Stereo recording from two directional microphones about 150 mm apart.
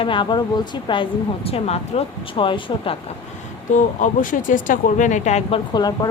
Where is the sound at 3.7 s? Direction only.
60° left (ahead or behind).